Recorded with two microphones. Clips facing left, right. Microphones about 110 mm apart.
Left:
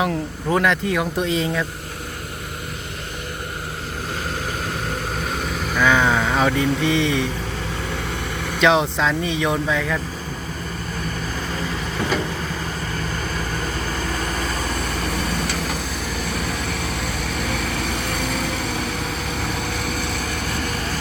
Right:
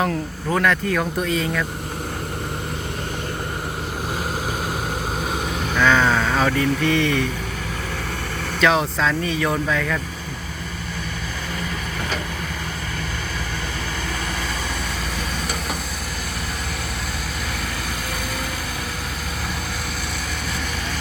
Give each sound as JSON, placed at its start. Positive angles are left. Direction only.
{"t": 0.5, "sound": "speech", "side_deg": 20}
{"t": 5.8, "sound": "speech", "side_deg": 15}
{"t": 8.6, "sound": "speech", "side_deg": 20}